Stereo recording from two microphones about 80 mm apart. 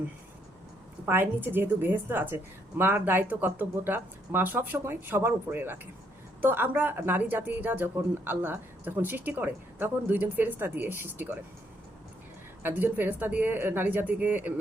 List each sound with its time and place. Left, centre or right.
1.0 s speech: right
12.6 s speech: right